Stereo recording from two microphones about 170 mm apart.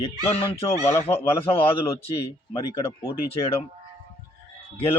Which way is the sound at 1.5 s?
35° left (ahead or behind).